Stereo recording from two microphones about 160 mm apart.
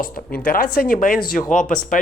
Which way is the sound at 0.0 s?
60° left (ahead or behind).